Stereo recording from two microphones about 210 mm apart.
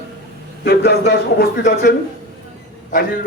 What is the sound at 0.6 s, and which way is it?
A man's voice, 50° left (ahead or behind).